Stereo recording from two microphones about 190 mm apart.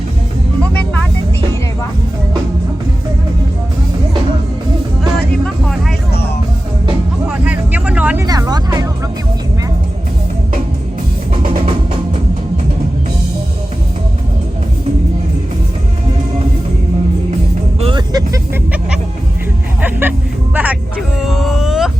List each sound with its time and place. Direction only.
7.4 s vehicle: 5° right (ahead or behind)
8.3 s music: 20° right (ahead or behind)
11.4 s music: 35° right (ahead or behind)
17.7 s music: 25° right (ahead or behind)
19.8 s music: 10° right (ahead or behind)
21.2 s a sound: centre (ahead or behind)